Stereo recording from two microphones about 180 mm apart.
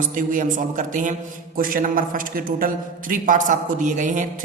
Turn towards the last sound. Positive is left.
turn(degrees=-45)  # may be behind; listen again after turning